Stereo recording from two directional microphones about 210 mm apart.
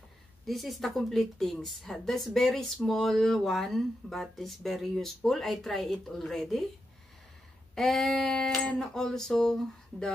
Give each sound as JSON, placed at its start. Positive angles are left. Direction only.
{"t": 0.5, "sound": "a woman's voice", "side_deg": 0}
{"t": 7.7, "sound": "a woman's voice", "side_deg": 0}